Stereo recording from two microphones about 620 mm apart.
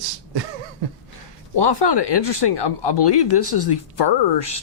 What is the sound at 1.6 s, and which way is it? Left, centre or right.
Speech, left.